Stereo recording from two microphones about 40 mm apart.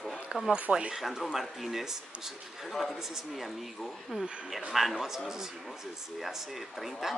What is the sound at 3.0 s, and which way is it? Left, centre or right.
A woman's voice, centre.